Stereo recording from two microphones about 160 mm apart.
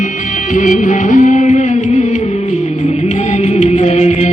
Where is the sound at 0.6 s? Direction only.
50° left (ahead or behind).